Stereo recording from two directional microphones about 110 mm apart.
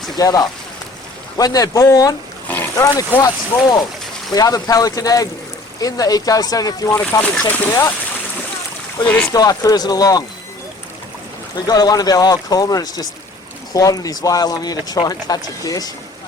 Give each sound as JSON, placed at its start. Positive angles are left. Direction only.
{"t": 0.2, "sound": "speech", "side_deg": 35}
{"t": 2.5, "sound": "a sound", "side_deg": 15}
{"t": 2.9, "sound": "speech", "side_deg": 35}
{"t": 7.2, "sound": "speech", "side_deg": 15}
{"t": 9.0, "sound": "speech", "side_deg": 10}
{"t": 9.3, "sound": "speech", "side_deg": 35}
{"t": 11.6, "sound": "speech", "side_deg": 35}